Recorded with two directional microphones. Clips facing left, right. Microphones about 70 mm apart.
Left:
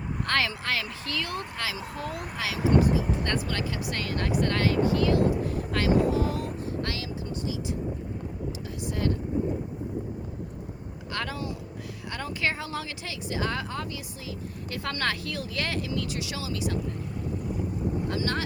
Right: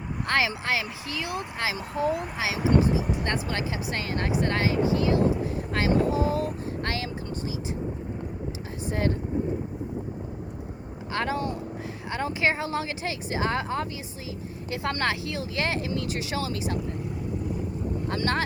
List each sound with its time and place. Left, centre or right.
0.3 s speech: centre
8.9 s speech: right
11.1 s speech: right
15.9 s speech: right
18.1 s speech: right